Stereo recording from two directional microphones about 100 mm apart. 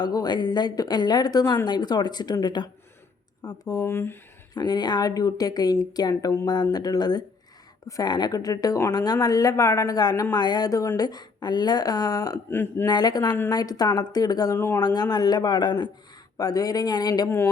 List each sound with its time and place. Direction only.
0.0 s speech: 40° left (ahead or behind)
3.8 s speech: 25° left (ahead or behind)
4.5 s speech: 45° left (ahead or behind)
12.5 s speech: 20° left (ahead or behind)
12.8 s speech: 40° left (ahead or behind)
14.5 s speech: 25° left (ahead or behind)
14.8 s speech: 45° left (ahead or behind)
16.4 s speech: 40° left (ahead or behind)
17.2 s speech: 25° left (ahead or behind)